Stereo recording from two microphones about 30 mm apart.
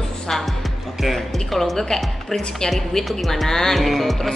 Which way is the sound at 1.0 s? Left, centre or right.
Centre.